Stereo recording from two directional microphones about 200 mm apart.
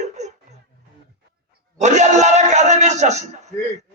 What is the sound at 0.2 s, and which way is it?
Music, 35° right (ahead or behind).